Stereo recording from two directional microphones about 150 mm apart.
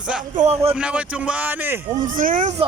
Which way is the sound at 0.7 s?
5° right (ahead or behind).